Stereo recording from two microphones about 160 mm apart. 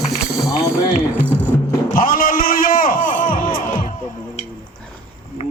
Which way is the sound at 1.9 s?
60° left (ahead or behind).